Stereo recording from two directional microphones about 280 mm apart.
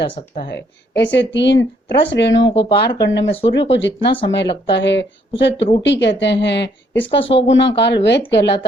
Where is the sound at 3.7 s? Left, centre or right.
Left.